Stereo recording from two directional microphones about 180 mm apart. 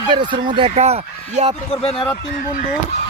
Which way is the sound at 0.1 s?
25° right (ahead or behind).